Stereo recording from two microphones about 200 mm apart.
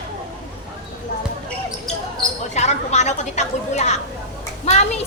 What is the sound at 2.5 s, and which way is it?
Speech, 35° left (ahead or behind).